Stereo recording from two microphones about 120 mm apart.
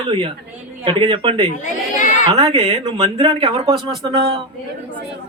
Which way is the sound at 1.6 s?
90° left.